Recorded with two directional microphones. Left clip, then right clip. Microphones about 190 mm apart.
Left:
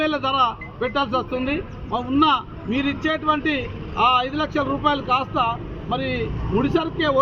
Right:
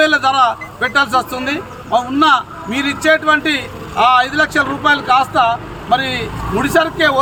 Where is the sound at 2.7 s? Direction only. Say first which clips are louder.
Right 9 dB; 90° right.